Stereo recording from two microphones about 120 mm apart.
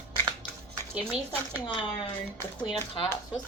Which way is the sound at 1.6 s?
45° left (ahead or behind).